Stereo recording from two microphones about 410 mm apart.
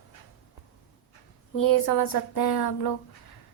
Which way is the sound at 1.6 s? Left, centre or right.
Left.